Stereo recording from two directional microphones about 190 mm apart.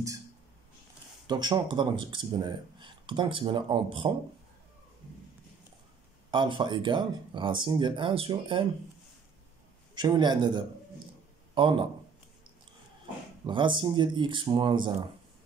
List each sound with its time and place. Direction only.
1.2 s speech: 20° right (ahead or behind)
6.3 s speech: 25° right (ahead or behind)
9.9 s a man's voice: 20° right (ahead or behind)
13.5 s speech: 25° right (ahead or behind)